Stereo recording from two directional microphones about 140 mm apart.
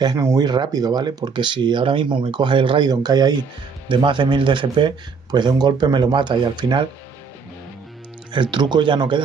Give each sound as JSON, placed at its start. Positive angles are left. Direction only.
{"t": 0.0, "sound": "speech", "side_deg": -25}
{"t": 8.3, "sound": "speech", "side_deg": -35}